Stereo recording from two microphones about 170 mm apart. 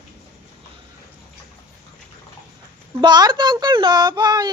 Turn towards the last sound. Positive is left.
turn(degrees=-25)  # may be behind; listen again after turning